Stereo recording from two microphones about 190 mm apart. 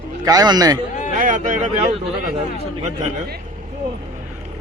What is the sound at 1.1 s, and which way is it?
Speech, 40° right (ahead or behind).